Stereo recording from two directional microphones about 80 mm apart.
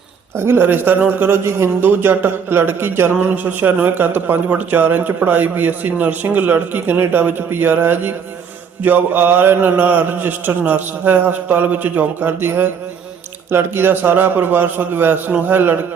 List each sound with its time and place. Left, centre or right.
0.3 s a man's voice: right